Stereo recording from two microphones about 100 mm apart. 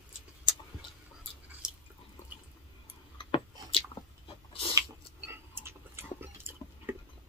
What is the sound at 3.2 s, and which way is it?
Chewing, 60° left (ahead or behind).